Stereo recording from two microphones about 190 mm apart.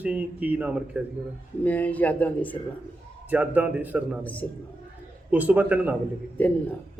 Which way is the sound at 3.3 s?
10° right (ahead or behind).